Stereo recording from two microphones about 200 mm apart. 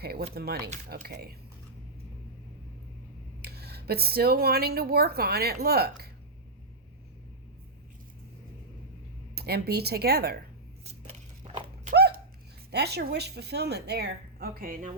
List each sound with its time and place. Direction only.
0.0 s speech: 50° right (ahead or behind)
3.4 s speech: 50° right (ahead or behind)
9.3 s speech: 50° right (ahead or behind)
11.4 s dog: 30° right (ahead or behind)
11.9 s a sound: 55° right (ahead or behind)
12.7 s a woman's voice: 55° right (ahead or behind)